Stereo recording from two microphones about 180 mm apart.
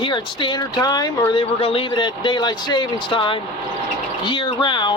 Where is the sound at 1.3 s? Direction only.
30° left (ahead or behind).